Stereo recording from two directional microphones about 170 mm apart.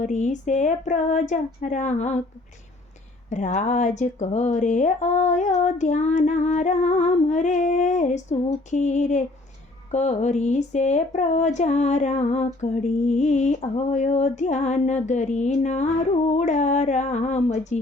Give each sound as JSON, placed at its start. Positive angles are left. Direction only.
{"t": 0.0, "sound": "speech", "side_deg": 45}
{"t": 3.2, "sound": "speech", "side_deg": 45}